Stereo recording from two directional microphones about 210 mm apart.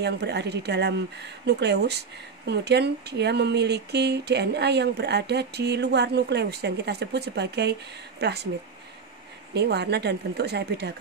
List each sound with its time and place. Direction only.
0.0 s speech: 55° right (ahead or behind)
9.5 s speech: 50° right (ahead or behind)